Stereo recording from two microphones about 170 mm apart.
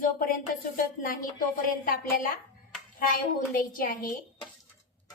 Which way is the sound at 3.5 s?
55° left (ahead or behind).